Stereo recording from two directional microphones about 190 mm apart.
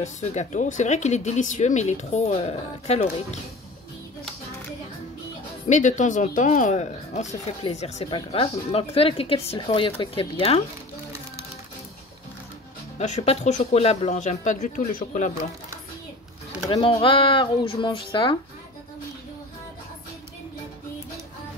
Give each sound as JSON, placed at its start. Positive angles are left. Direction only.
{"t": 0.0, "sound": "speech", "side_deg": 35}
{"t": 5.7, "sound": "speech", "side_deg": 40}
{"t": 13.0, "sound": "speech", "side_deg": 35}
{"t": 16.7, "sound": "speech", "side_deg": 30}